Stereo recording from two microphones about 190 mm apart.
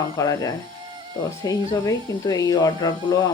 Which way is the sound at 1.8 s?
20° left (ahead or behind).